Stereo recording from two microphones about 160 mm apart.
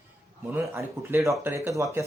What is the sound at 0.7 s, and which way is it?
Speech, 15° right (ahead or behind).